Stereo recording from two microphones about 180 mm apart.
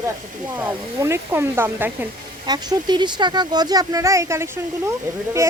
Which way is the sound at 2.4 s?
25° right (ahead or behind).